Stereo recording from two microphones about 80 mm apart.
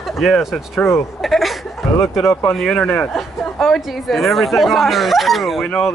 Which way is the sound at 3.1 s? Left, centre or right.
Centre.